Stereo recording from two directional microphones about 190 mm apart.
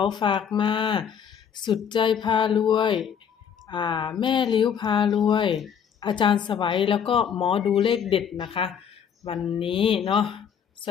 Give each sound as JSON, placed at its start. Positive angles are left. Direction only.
{"t": 0.0, "sound": "a woman's voice", "side_deg": 25}